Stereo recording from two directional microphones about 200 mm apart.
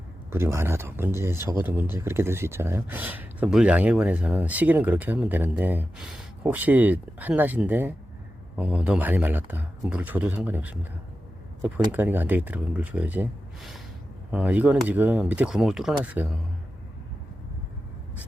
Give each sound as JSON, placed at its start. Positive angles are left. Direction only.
{"t": 0.3, "sound": "speech", "side_deg": -10}
{"t": 11.9, "sound": "speech", "side_deg": -10}